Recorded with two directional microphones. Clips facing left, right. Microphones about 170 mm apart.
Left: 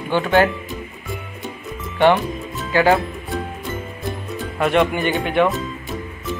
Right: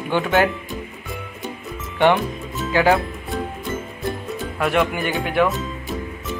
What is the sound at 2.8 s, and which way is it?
Music, centre (ahead or behind).